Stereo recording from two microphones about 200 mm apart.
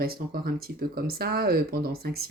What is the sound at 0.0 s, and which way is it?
Speech, 50° right (ahead or behind).